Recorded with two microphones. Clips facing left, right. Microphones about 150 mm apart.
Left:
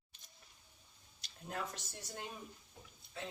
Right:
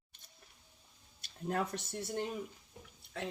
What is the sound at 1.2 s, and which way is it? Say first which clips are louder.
Speech: right 8 dB; 60° right (ahead or behind).